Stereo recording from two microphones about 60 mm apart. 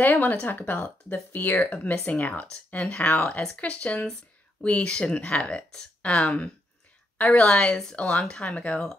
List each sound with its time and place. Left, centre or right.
0.0 s speech: left